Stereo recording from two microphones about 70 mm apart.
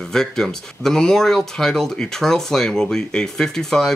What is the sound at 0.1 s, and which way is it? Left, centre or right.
Speech, centre.